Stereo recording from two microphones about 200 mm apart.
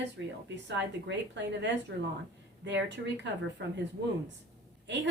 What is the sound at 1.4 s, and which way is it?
Speech, 60° right (ahead or behind).